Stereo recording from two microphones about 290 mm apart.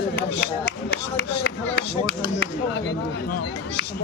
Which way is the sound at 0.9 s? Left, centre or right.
Left.